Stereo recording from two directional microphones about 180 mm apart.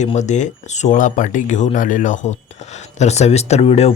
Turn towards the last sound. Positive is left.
turn(degrees=35)  # may be behind; listen again after turning